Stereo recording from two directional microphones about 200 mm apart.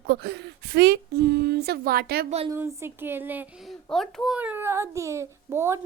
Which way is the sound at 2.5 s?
10° right (ahead or behind).